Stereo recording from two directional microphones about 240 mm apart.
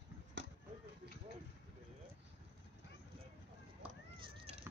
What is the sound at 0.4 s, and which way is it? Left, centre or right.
Basketball bounce, right.